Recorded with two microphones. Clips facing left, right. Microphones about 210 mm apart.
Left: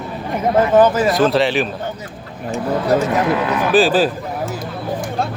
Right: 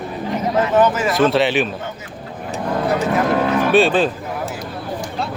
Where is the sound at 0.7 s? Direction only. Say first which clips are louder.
Left 3 dB; 35° left (ahead or behind).